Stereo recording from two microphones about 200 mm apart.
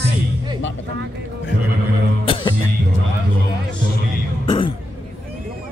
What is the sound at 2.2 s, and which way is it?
Music, 25° left (ahead or behind).